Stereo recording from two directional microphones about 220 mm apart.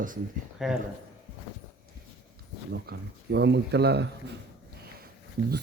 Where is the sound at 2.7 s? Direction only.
45° right (ahead or behind).